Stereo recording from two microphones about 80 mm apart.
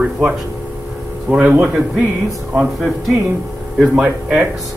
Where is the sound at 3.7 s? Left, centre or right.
Centre.